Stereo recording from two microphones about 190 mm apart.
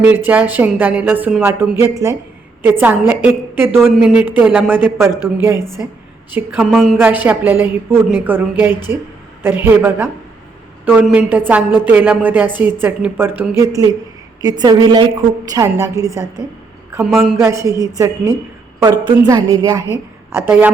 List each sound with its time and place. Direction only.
0.3 s a woman's voice: 10° right (ahead or behind)
6.3 s a woman's voice: 10° right (ahead or behind)
6.7 s a woman's voice: centre (ahead or behind); by 16.2 s 15° right (ahead or behind)
16.9 s speech: 5° right (ahead or behind)
17.3 s a woman's voice: 15° right (ahead or behind)